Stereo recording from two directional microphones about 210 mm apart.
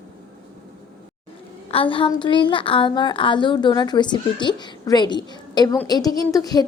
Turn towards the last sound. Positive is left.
turn(degrees=15)  # may be behind; listen again after turning